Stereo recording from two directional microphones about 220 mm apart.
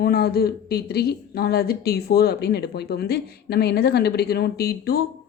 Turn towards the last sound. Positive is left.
turn(degrees=45)  # may be behind; listen again after turning